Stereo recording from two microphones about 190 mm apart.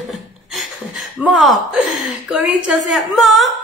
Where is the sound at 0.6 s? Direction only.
Centre (ahead or behind).